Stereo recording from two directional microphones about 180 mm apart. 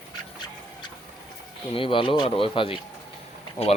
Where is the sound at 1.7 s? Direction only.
30° left (ahead or behind).